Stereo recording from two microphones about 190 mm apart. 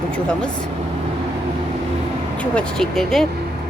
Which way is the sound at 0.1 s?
5° left (ahead or behind).